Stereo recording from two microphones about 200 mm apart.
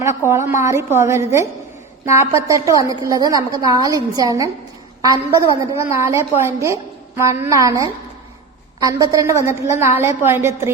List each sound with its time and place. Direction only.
0.3 s a woman's voice: 15° right (ahead or behind)